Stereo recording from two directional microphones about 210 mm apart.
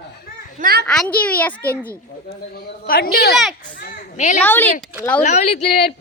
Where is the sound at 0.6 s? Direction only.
45° right (ahead or behind).